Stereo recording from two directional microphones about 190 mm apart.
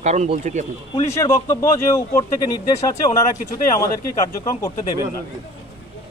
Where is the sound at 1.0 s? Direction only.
15° left (ahead or behind).